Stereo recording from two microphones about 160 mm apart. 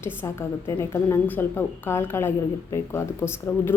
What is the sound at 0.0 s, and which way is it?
A woman's voice, 15° left (ahead or behind).